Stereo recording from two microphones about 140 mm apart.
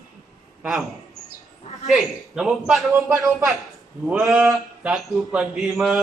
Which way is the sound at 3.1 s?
20° right (ahead or behind).